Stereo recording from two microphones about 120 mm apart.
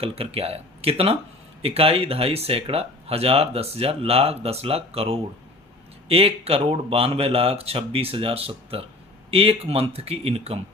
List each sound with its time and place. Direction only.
0.0 s speech: 55° right (ahead or behind)